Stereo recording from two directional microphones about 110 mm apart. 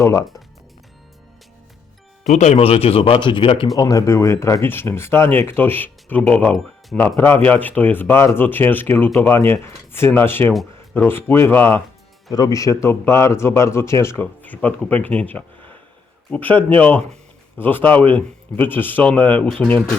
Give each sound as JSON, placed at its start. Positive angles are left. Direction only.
{"t": 0.0, "sound": "speech", "side_deg": 25}
{"t": 2.3, "sound": "speech", "side_deg": 85}
{"t": 3.8, "sound": "speech", "side_deg": 35}
{"t": 12.3, "sound": "speech", "side_deg": 35}